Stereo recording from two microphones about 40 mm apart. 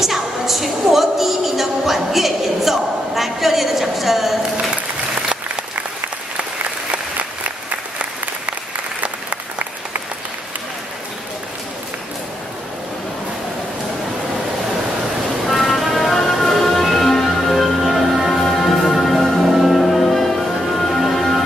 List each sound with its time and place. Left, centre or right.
0.0 s a sound: centre
6.9 s applause: right
9.0 s applause: right
15.4 s music: centre